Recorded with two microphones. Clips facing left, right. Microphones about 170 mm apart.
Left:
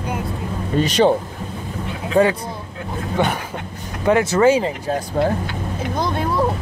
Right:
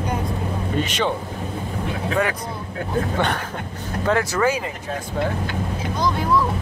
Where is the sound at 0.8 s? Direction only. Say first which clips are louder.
Left 9 dB; 35° left (ahead or behind).